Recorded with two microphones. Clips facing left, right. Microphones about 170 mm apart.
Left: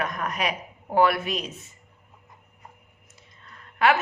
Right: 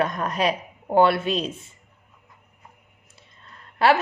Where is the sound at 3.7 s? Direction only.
35° right (ahead or behind).